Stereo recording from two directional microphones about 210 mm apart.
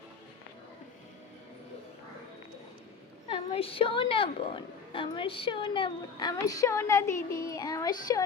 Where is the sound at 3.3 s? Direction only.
25° left (ahead or behind).